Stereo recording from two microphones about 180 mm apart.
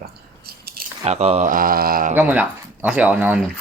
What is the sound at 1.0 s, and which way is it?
Speech, 35° right (ahead or behind).